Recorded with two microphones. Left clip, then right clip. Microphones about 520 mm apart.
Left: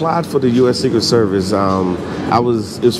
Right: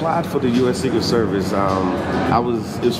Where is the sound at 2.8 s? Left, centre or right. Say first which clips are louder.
Left 6 dB; left.